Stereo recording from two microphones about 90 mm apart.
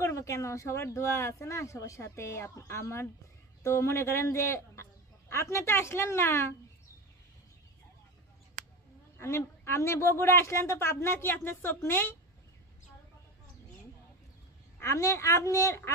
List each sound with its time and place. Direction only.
0.0 s speech: 35° left (ahead or behind)
9.7 s a woman's voice: 30° left (ahead or behind)
14.8 s speech: 30° left (ahead or behind)